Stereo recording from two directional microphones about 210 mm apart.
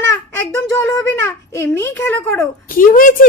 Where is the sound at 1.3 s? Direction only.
15° left (ahead or behind).